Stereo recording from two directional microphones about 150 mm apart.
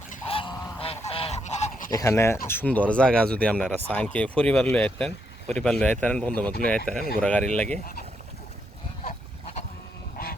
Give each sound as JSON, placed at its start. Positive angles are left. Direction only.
{"t": 0.3, "sound": "goose", "side_deg": 35}
{"t": 1.9, "sound": "speech", "side_deg": 20}